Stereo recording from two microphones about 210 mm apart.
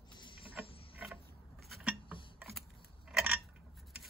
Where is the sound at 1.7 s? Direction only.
5° right (ahead or behind).